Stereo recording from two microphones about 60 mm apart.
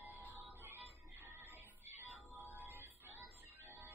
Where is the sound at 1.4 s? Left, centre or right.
Right.